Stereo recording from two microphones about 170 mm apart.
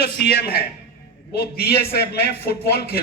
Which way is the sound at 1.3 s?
75° left (ahead or behind).